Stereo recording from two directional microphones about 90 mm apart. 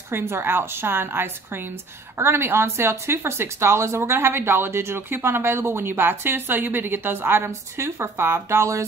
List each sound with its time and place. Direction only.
0.1 s speech: 25° right (ahead or behind)